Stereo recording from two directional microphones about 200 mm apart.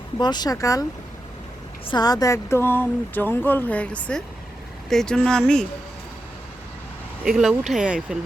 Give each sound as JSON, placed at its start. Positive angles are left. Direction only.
{"t": 0.2, "sound": "speech", "side_deg": 20}
{"t": 1.9, "sound": "speech", "side_deg": 20}
{"t": 7.3, "sound": "speech", "side_deg": 0}